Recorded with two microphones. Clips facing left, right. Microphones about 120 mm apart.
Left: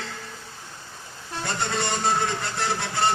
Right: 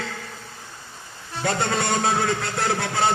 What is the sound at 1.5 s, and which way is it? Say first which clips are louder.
A man's voice: right 5 dB; 60° right (ahead or behind).